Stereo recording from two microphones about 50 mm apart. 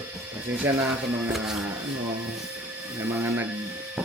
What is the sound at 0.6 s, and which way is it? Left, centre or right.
Speech, right.